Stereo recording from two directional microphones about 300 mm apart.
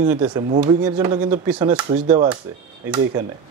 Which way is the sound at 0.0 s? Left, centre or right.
Right.